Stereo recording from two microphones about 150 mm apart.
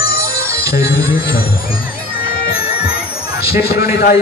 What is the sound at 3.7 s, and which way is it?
Music, 85° left.